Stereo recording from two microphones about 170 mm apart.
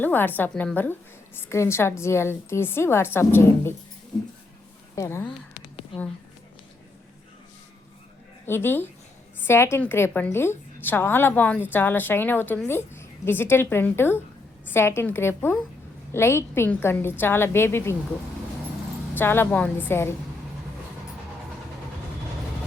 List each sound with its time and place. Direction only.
0.0 s a woman's voice: 10° left (ahead or behind)
4.9 s a woman's voice: 15° left (ahead or behind)
8.4 s a woman's voice: 15° left (ahead or behind)
19.1 s a woman's voice: 15° left (ahead or behind)